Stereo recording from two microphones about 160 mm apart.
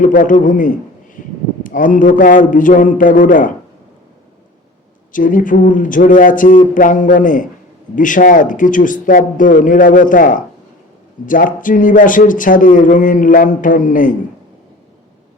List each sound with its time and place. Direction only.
0.0 s a man's voice: 55° left (ahead or behind)
5.1 s speech: 55° left (ahead or behind)